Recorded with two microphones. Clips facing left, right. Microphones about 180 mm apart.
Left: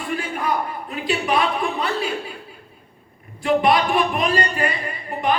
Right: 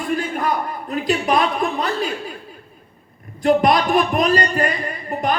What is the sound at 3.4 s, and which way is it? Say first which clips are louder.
A man's voice: right 2 dB; 40° right (ahead or behind).